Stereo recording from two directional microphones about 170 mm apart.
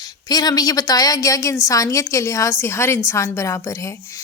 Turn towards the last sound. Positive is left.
turn(degrees=20)  # may be behind; listen again after turning